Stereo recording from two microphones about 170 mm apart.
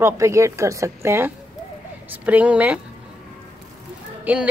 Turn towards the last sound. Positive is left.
turn(degrees=-10)  # may be behind; listen again after turning